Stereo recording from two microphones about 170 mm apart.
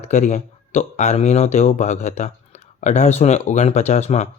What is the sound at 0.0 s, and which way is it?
Speech, 40° left (ahead or behind).